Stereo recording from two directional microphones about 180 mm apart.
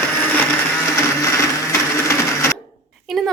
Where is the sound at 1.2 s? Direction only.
15° left (ahead or behind).